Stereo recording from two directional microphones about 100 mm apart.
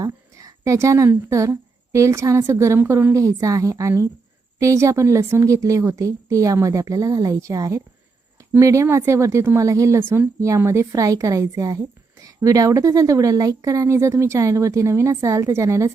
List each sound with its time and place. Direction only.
0.0 s a woman's voice: 35° right (ahead or behind)